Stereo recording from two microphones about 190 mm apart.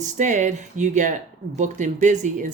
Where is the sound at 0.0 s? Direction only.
40° right (ahead or behind).